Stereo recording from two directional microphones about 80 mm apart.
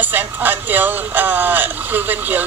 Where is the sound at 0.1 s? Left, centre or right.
Right.